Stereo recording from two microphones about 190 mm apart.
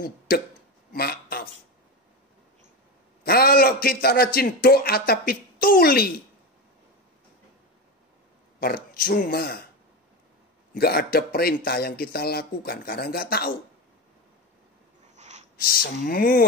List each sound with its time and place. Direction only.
0.3 s speech: 50° left (ahead or behind)
0.9 s a sound: 55° left (ahead or behind)
3.3 s a man's voice: 55° left (ahead or behind)
8.5 s speech: 50° left (ahead or behind)
10.7 s a man's voice: 50° left (ahead or behind)
15.1 s a sound: 40° right (ahead or behind)
15.6 s a man's voice: 50° left (ahead or behind)